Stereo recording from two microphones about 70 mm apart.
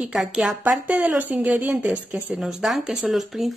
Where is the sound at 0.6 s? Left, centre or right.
Right.